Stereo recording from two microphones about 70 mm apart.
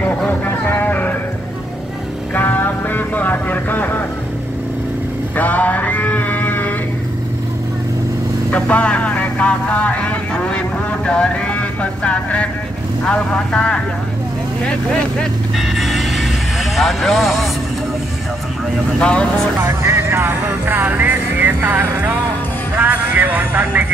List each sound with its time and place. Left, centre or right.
0.3 s music: left
2.3 s music: left
5.3 s sheep: left
8.5 s vehicle: left
11.1 s music: centre
13.0 s speech: centre
14.6 s vehicle: centre
15.5 s vehicle: centre
16.7 s speech: centre
18.9 s speech: centre
19.6 s music: right
22.8 s vehicle: right